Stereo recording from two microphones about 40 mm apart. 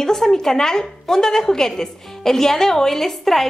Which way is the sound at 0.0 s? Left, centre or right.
Centre.